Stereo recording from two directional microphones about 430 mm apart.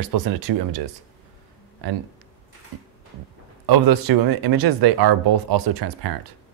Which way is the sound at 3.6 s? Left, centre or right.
Right.